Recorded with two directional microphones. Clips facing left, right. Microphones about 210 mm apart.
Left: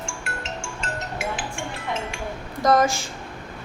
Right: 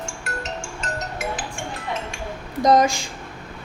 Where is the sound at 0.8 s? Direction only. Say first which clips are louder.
Even; 40° right (ahead or behind).